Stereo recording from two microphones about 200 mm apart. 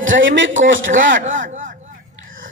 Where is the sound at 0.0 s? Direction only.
70° right (ahead or behind).